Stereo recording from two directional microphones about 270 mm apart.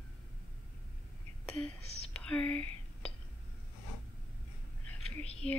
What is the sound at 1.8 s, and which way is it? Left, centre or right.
Whispering, left.